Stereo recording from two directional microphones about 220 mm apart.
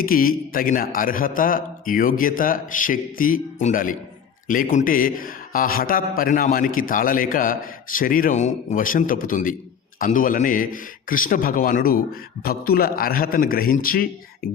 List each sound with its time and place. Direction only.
0.0 s a man's voice: 40° left (ahead or behind)